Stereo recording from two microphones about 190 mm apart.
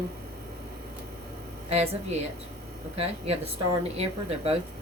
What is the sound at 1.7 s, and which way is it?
Speech, 35° right (ahead or behind).